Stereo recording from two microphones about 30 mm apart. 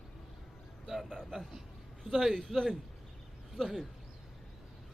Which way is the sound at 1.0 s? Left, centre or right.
Centre.